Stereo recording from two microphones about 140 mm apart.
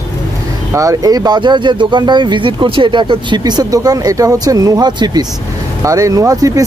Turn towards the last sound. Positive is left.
turn(degrees=-25)  # may be behind; listen again after turning